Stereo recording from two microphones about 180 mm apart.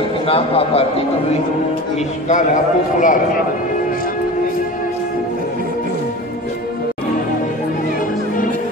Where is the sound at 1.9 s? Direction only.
40° left (ahead or behind).